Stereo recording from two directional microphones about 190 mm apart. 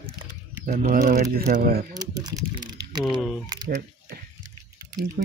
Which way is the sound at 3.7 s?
50° right (ahead or behind).